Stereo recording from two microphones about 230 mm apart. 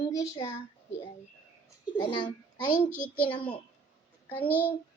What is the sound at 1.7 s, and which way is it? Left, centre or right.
A child's voice, centre.